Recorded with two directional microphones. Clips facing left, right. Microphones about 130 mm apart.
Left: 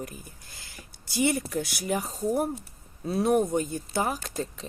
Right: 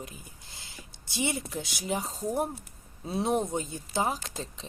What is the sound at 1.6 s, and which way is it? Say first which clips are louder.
Speech: left 3 dB; 20° right (ahead or behind).